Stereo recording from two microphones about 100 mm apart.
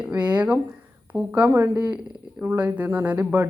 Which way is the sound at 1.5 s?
30° right (ahead or behind).